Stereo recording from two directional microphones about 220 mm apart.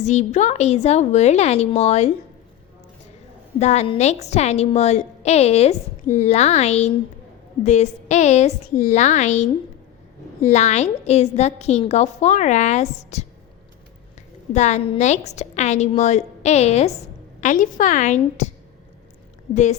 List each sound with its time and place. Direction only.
0.0 s a woman's voice: 30° left (ahead or behind)
3.6 s a woman's voice: 30° left (ahead or behind)
10.5 s a woman's voice: 30° left (ahead or behind)
14.5 s a woman's voice: 30° left (ahead or behind)